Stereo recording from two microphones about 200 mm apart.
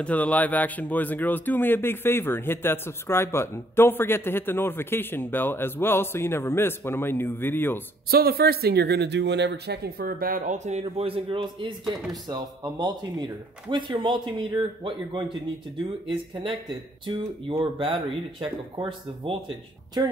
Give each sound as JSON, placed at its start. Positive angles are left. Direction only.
{"t": 0.0, "sound": "a man's voice", "side_deg": 5}
{"t": 8.1, "sound": "speech", "side_deg": -50}